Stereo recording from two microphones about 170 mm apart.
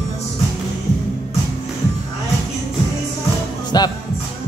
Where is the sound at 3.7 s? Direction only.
25° left (ahead or behind).